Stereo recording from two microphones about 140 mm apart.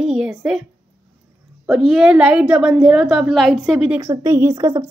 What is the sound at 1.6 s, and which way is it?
A woman's voice, 5° right (ahead or behind).